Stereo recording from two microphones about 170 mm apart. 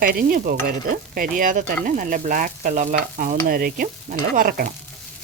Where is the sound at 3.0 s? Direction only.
55° right (ahead or behind).